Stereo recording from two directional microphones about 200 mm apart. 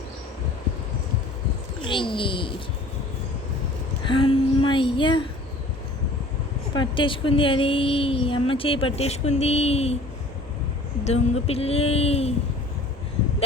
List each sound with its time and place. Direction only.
1.8 s speech: 25° left (ahead or behind)
4.1 s speech: 25° left (ahead or behind)
6.7 s speech: 25° left (ahead or behind)
11.0 s speech: 30° left (ahead or behind)